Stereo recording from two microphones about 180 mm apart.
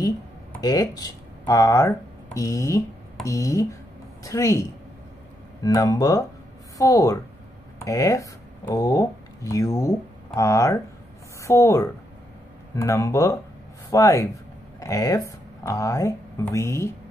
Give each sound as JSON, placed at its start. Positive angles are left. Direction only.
{"t": 0.6, "sound": "speech", "side_deg": 20}